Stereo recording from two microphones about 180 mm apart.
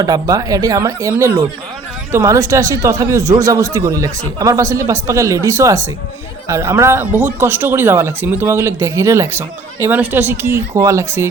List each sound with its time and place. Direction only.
0.0 s a man's voice: 20° right (ahead or behind)